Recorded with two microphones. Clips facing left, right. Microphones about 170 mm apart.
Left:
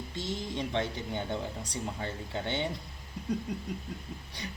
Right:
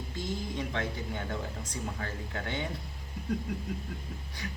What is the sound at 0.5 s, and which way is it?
Speech, 25° left (ahead or behind).